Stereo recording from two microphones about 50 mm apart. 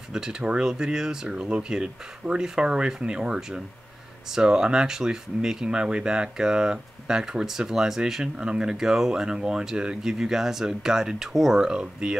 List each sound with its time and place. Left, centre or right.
0.1 s speech: centre